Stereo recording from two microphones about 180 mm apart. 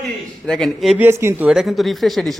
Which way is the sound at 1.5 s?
Centre (ahead or behind).